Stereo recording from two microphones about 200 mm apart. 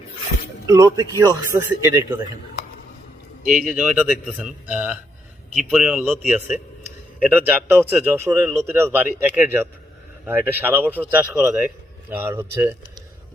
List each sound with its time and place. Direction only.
0.7 s a man's voice: 15° right (ahead or behind)
3.4 s speech: 40° right (ahead or behind)
3.7 s a man's voice: 5° right (ahead or behind)